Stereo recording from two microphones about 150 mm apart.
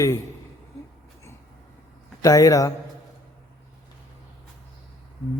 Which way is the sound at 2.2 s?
20° left (ahead or behind).